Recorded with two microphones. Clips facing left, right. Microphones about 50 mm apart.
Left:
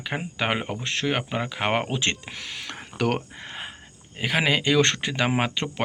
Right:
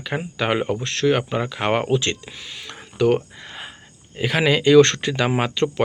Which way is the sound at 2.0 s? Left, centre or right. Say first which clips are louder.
Right 1 dB; left.